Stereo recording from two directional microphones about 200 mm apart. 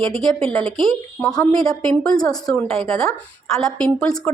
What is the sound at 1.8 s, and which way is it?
A woman's voice, 5° left (ahead or behind).